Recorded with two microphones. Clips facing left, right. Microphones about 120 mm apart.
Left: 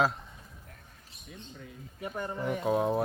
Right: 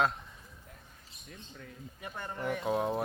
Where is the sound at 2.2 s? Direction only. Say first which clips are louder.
Left 3 dB; 10° left (ahead or behind).